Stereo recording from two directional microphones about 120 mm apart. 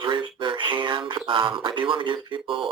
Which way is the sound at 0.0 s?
40° right (ahead or behind).